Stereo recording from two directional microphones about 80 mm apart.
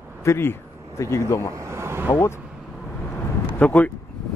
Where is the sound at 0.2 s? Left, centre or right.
Left.